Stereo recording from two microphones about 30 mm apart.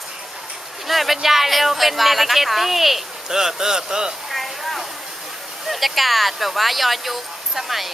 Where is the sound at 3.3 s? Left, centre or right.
Centre.